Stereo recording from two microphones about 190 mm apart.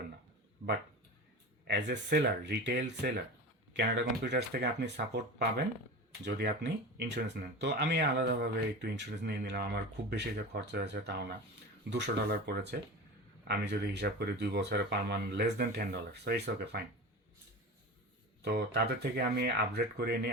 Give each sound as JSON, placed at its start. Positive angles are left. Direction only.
{"t": 1.6, "sound": "speech", "side_deg": -60}
{"t": 18.4, "sound": "speech", "side_deg": -60}